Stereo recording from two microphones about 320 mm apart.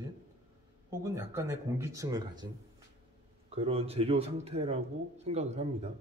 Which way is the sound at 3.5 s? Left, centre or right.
Centre.